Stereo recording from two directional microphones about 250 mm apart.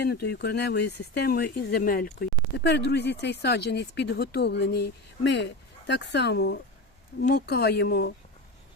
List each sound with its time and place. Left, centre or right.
0.0 s speech: left